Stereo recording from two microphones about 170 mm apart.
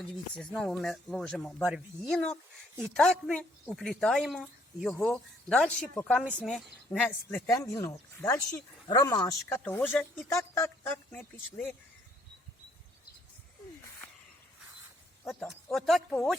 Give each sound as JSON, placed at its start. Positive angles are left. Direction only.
{"t": 0.0, "sound": "speech", "side_deg": 5}
{"t": 5.9, "sound": "speech", "side_deg": 15}
{"t": 6.4, "sound": "speech", "side_deg": 0}
{"t": 15.3, "sound": "speech", "side_deg": 0}